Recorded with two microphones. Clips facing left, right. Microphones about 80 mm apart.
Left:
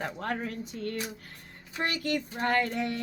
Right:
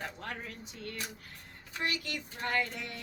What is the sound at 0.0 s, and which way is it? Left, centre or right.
Speech, left.